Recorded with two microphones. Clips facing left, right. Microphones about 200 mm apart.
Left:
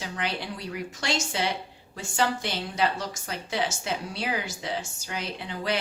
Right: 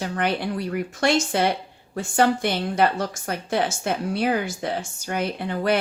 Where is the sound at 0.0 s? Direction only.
55° right (ahead or behind).